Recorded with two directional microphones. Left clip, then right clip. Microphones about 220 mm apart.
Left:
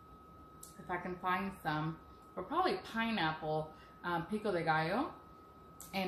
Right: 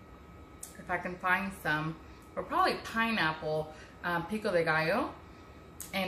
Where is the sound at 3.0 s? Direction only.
5° right (ahead or behind).